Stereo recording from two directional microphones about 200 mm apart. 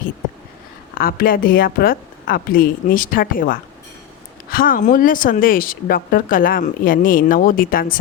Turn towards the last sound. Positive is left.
turn(degrees=45)  # may be behind; listen again after turning